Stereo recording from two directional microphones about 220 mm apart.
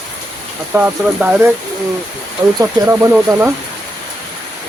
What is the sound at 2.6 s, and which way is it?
Speech, 10° right (ahead or behind).